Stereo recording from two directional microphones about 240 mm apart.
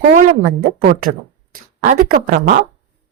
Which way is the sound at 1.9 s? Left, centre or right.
Right.